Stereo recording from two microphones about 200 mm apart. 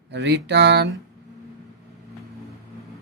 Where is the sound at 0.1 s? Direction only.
60° right (ahead or behind).